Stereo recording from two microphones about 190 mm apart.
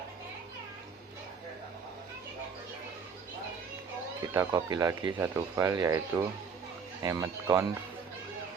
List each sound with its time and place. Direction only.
4.4 s speech: 20° right (ahead or behind)